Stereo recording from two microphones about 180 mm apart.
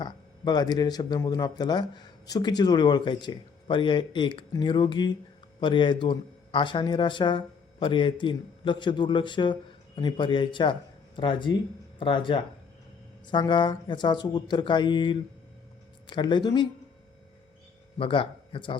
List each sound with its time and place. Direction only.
0.0 s a man's voice: 25° left (ahead or behind)
17.9 s speech: 30° left (ahead or behind)